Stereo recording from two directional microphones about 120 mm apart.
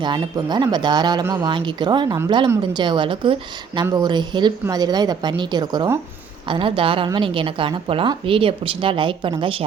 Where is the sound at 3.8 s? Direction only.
30° right (ahead or behind).